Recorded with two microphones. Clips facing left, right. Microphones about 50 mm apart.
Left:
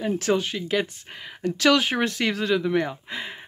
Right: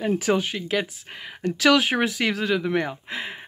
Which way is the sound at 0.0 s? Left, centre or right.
Centre.